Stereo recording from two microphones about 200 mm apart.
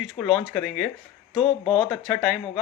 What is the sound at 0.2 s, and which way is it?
Speech, 5° left (ahead or behind).